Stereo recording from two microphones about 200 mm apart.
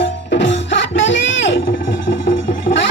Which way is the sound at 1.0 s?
70° left (ahead or behind).